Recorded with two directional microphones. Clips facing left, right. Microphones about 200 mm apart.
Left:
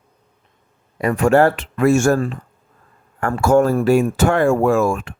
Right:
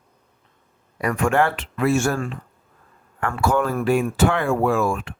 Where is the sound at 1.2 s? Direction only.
40° left (ahead or behind).